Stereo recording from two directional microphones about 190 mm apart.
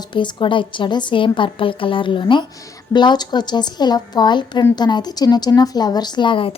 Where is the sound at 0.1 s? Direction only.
25° left (ahead or behind).